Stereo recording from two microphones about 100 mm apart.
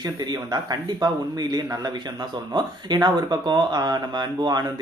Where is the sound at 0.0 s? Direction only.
40° right (ahead or behind).